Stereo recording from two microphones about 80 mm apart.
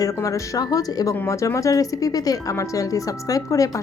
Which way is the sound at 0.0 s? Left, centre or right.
Left.